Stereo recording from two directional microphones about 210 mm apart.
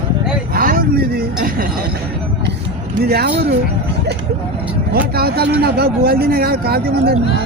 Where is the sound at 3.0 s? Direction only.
50° right (ahead or behind).